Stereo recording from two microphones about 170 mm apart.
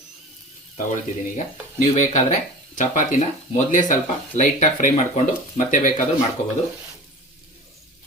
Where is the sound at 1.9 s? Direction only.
45° left (ahead or behind).